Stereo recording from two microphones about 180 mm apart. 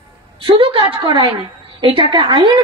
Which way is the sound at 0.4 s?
25° right (ahead or behind).